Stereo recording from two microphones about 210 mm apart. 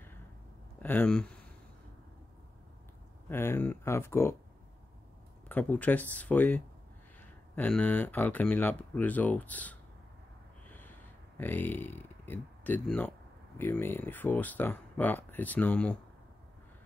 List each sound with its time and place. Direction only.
0.8 s speech: 5° left (ahead or behind)
3.3 s speech: 10° left (ahead or behind)
5.5 s speech: 10° left (ahead or behind)
10.7 s a sound: 10° left (ahead or behind)
13.6 s speech: 10° left (ahead or behind)